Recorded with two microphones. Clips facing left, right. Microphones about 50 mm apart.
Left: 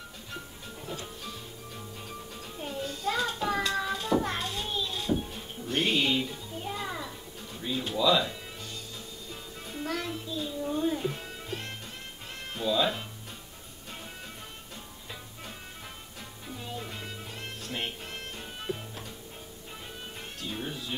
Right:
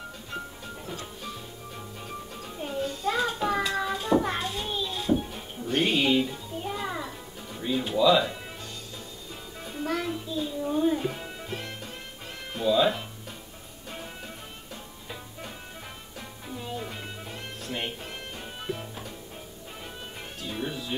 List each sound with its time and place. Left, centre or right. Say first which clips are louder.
2.6 s music: right 3 dB; centre
3.0 s a sound: right 2 dB; centre
7.8 s speech: right 4 dB; centre
9.7 s music: right 4 dB; centre
16.4 s music: right 3 dB; centre
20.3 s music: right 4 dB; centre